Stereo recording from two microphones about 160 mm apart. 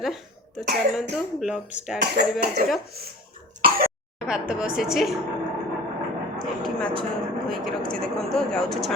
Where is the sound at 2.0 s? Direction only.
75° right (ahead or behind).